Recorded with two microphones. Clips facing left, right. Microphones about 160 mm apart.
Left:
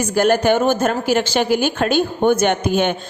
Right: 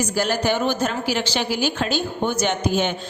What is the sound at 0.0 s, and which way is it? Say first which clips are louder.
A woman's voice: left 6 dB; 55° left (ahead or behind).